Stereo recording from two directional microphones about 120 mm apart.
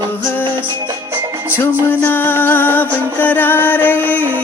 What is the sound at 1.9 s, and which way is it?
Music, 15° left (ahead or behind).